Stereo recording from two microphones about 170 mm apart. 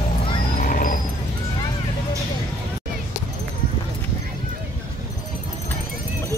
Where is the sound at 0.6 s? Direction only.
55° left (ahead or behind).